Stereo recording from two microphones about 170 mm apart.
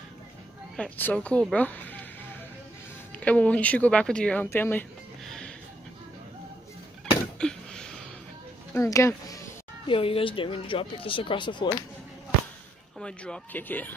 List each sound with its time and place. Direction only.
0.7 s speech: 10° left (ahead or behind)
3.2 s speech: 10° left (ahead or behind)
7.3 s a sound: 5° left (ahead or behind)
8.7 s speech: 20° left (ahead or behind)
9.8 s speech: 30° left (ahead or behind)
13.0 s speech: 5° left (ahead or behind)